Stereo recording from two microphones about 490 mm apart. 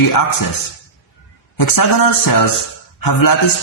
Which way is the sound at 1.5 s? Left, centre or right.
Left.